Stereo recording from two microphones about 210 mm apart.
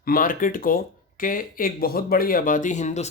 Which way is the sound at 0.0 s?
45° left (ahead or behind).